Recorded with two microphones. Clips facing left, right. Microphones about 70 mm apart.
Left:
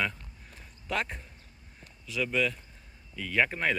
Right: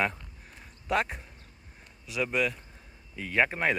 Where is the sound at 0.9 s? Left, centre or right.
Centre.